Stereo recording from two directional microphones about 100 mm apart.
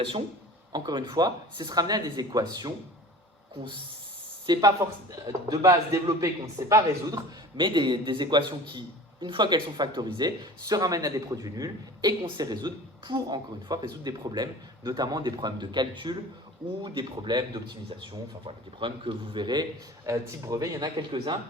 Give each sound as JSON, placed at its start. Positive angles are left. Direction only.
{"t": 0.7, "sound": "speech", "side_deg": -45}
{"t": 3.6, "sound": "speech", "side_deg": -60}
{"t": 4.6, "sound": "a man's voice", "side_deg": -35}
{"t": 7.5, "sound": "a man's voice", "side_deg": -55}
{"t": 18.4, "sound": "speech", "side_deg": -60}
{"t": 20.1, "sound": "a man's voice", "side_deg": -30}